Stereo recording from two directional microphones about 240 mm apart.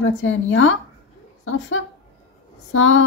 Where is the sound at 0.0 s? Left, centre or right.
Left.